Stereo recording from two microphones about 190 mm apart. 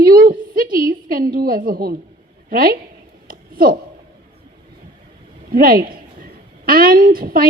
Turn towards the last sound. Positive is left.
turn(degrees=-50)  # may be behind; listen again after turning